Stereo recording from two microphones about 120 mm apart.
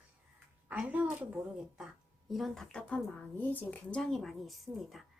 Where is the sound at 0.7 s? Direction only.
10° right (ahead or behind).